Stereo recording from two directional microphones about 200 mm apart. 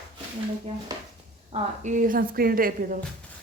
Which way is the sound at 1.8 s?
40° right (ahead or behind).